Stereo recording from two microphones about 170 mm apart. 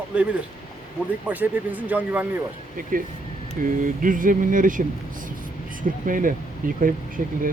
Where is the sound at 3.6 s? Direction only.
55° right (ahead or behind).